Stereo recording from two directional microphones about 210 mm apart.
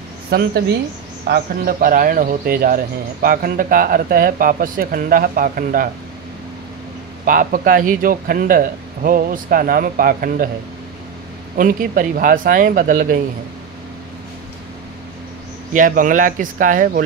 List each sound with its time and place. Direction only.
0.3 s speech: 50° right (ahead or behind)
7.2 s speech: 40° right (ahead or behind)
11.5 s speech: 40° right (ahead or behind)
15.7 s speech: 40° right (ahead or behind)